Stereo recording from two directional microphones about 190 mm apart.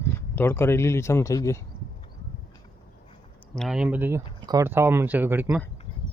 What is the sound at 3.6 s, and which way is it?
Speech, centre (ahead or behind).